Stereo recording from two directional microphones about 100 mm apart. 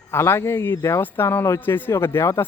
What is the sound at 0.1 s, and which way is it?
Speech, 25° left (ahead or behind).